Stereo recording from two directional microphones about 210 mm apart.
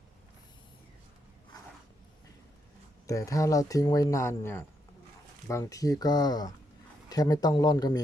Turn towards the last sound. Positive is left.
turn(degrees=20)  # may be behind; listen again after turning